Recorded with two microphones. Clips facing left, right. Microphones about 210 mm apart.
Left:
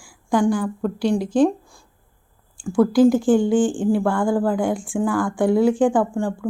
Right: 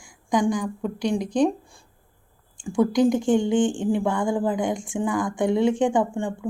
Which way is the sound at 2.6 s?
5° left (ahead or behind).